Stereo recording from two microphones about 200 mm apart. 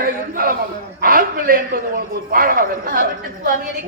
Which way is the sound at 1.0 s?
45° right (ahead or behind).